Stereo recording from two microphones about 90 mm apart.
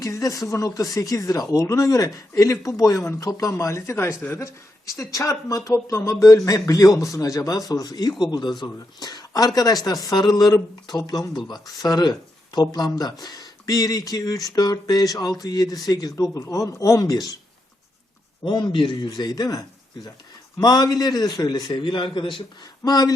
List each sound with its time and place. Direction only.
0.0 s speech: 40° left (ahead or behind)
18.4 s speech: 60° left (ahead or behind)
22.8 s speech: 45° left (ahead or behind)